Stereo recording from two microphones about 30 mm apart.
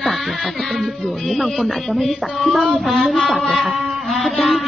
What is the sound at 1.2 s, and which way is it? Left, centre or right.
Speech, centre.